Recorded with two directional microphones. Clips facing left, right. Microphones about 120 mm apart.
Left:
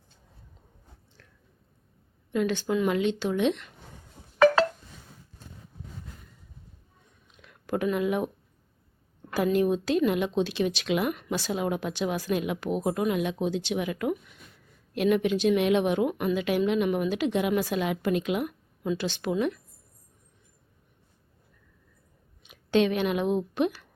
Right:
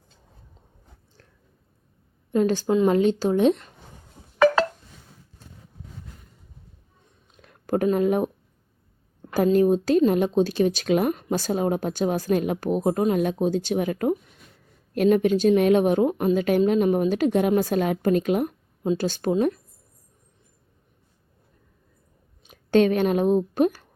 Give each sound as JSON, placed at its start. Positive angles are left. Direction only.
{"t": 2.3, "sound": "speech", "side_deg": -40}
{"t": 7.3, "sound": "a sound", "side_deg": -40}
{"t": 9.3, "sound": "speech", "side_deg": -40}
{"t": 22.4, "sound": "a woman's voice", "side_deg": -45}